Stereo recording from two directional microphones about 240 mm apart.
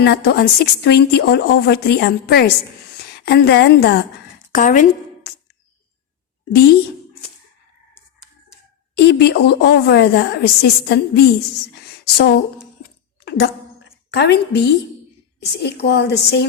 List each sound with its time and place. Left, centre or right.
0.0 s a woman's voice: left
4.5 s a woman's voice: left
9.0 s a woman's voice: left
11.7 s a sound: left
15.4 s a woman's voice: left